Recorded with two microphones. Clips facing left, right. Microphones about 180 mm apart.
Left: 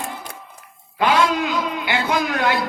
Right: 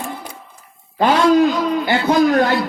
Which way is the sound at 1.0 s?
40° right (ahead or behind).